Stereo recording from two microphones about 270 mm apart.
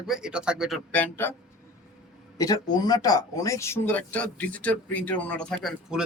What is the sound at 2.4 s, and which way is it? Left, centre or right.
Speech, centre.